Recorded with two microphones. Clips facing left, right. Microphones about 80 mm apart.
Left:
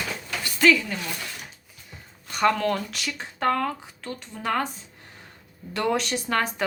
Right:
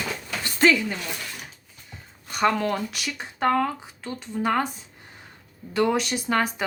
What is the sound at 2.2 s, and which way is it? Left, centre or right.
Speech, centre.